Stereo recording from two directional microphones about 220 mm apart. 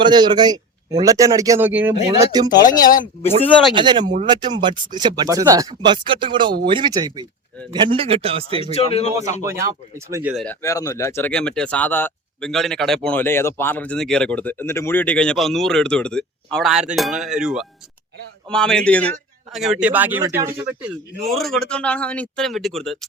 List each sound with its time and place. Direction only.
0.0 s a man's voice: 20° right (ahead or behind)
3.8 s speech: 20° right (ahead or behind)
8.6 s a man's voice: 25° left (ahead or behind)
9.4 s a man's voice: 15° right (ahead or behind)
10.3 s a man's voice: 5° left (ahead or behind); by 20.9 s 10° right (ahead or behind)
21.2 s speech: centre (ahead or behind)